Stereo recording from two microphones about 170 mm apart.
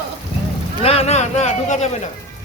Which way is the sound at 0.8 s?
35° left (ahead or behind).